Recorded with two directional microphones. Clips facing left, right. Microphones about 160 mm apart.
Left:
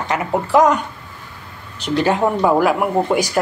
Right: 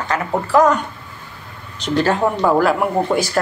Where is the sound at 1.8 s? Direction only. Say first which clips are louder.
Even; 15° left (ahead or behind).